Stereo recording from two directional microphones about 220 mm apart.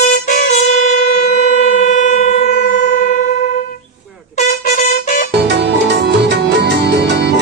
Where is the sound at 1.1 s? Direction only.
35° left (ahead or behind).